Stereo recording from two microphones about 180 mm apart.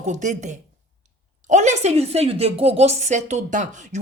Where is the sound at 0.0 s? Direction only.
40° right (ahead or behind).